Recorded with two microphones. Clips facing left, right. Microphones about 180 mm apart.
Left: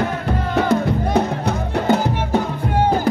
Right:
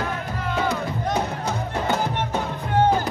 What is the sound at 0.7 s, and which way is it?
Music, 65° left (ahead or behind).